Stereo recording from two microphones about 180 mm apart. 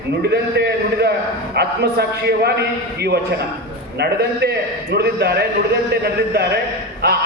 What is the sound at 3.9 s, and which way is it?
A man's voice, 65° right (ahead or behind).